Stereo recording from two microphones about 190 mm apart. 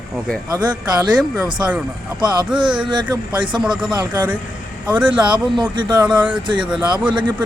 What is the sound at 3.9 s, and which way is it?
Speech, 20° right (ahead or behind).